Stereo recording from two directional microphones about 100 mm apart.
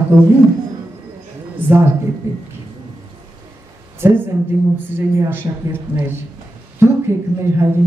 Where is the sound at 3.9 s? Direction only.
20° right (ahead or behind).